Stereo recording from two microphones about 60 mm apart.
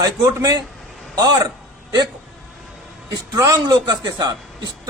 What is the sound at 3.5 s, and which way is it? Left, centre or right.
Speech, right.